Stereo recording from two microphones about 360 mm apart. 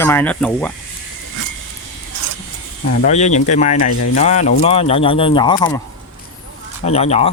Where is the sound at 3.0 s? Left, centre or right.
Centre.